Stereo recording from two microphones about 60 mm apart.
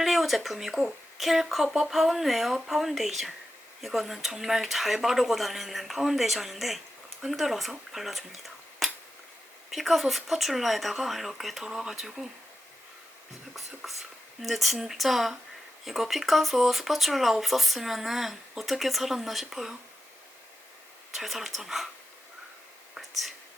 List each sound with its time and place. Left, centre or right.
0.0 s speech: centre
13.5 s speech: centre
21.1 s speech: centre